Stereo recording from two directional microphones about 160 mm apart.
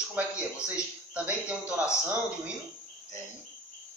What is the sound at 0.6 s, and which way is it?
Speech, 10° right (ahead or behind).